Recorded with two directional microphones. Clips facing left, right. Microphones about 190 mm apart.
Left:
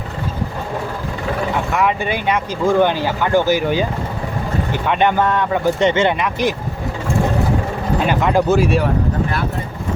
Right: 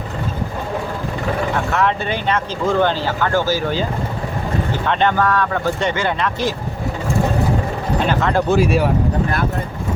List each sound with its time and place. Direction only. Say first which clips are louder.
1.7 s speech: left 2 dB; 10° left (ahead or behind)
4.9 s speech: left 1 dB; 15° left (ahead or behind)
7.9 s speech: left 2 dB; 15° left (ahead or behind)